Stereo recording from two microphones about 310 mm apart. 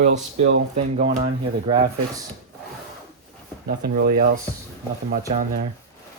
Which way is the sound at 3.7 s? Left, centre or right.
Right.